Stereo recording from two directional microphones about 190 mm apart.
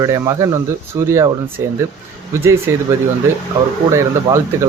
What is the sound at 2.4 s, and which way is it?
Speech, 15° right (ahead or behind).